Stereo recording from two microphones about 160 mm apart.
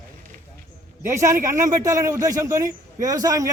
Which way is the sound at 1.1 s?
15° right (ahead or behind).